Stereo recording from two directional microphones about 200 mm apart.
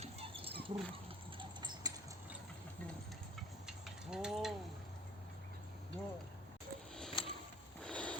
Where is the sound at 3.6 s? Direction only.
5° right (ahead or behind).